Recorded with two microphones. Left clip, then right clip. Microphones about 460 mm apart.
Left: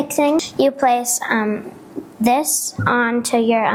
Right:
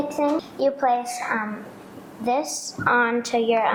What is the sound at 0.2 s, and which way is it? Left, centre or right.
A woman's voice, left.